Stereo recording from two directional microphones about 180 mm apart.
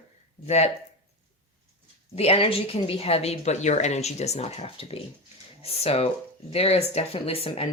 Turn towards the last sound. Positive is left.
turn(degrees=35)  # may be behind; listen again after turning